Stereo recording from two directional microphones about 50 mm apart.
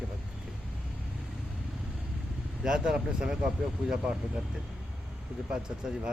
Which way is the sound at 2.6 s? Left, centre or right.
Centre.